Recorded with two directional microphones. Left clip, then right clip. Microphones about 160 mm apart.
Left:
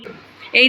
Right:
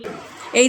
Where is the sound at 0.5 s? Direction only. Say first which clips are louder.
Left 3 dB; 15° right (ahead or behind).